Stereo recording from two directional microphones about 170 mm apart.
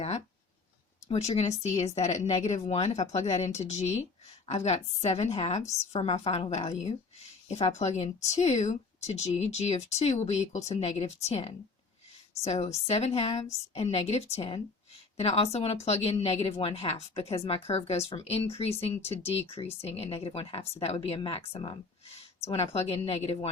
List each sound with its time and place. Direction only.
1.0 s speech: 40° left (ahead or behind)